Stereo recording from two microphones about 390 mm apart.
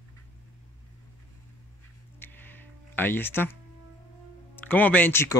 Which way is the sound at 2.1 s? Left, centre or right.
Centre.